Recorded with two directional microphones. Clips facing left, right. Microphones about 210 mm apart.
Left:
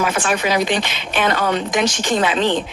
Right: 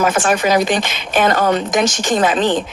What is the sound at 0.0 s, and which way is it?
A woman's voice, 45° right (ahead or behind).